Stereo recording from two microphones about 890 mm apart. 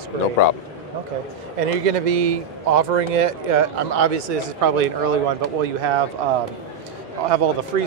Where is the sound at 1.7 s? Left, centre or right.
Right.